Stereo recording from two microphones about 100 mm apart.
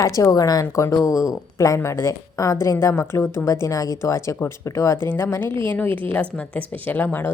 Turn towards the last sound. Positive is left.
turn(degrees=20)  # may be behind; listen again after turning